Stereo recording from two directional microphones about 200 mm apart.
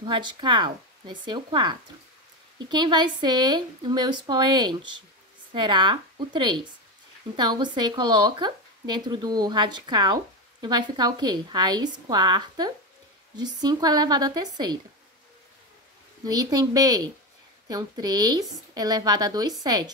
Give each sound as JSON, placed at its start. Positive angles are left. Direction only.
{"t": 0.0, "sound": "speech", "side_deg": -25}
{"t": 16.3, "sound": "a woman's voice", "side_deg": -20}